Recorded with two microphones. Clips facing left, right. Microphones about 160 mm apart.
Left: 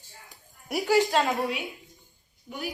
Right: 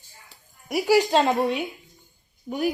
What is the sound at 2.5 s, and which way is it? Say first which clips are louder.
Speech: right 9 dB; 40° right (ahead or behind).